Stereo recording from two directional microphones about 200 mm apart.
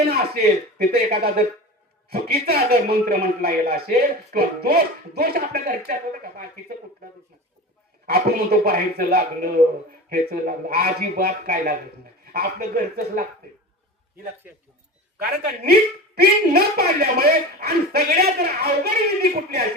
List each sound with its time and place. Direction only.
0.0 s a sound: 55° right (ahead or behind)
0.3 s speech: 50° right (ahead or behind)
15.2 s speech: 50° right (ahead or behind)